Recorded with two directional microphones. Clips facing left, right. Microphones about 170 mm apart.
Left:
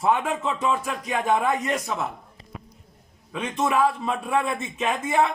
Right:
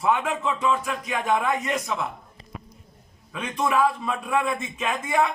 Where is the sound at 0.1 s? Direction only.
40° left (ahead or behind).